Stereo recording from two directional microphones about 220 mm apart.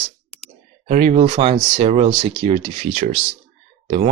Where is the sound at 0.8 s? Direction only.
30° right (ahead or behind).